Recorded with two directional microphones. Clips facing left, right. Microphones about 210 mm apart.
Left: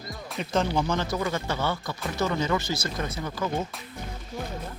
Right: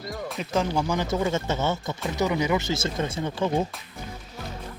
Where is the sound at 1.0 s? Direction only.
25° right (ahead or behind).